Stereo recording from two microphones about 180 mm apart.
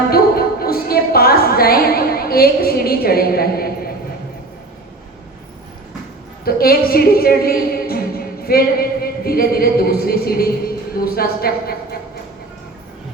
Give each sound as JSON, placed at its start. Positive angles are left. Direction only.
{"t": 0.1, "sound": "music", "side_deg": 55}
{"t": 6.4, "sound": "a woman's voice", "side_deg": 55}